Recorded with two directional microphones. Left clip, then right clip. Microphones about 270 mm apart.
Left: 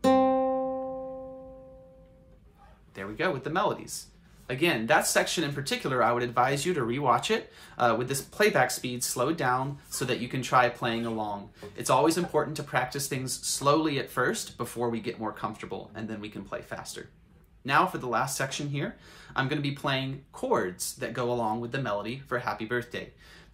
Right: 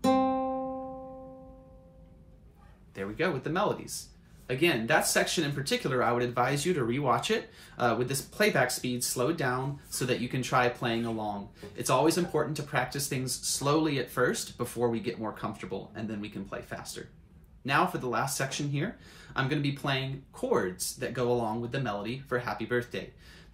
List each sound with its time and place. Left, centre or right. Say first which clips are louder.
0.0 s music: left 4 dB; left
3.0 s speech: left 1 dB; centre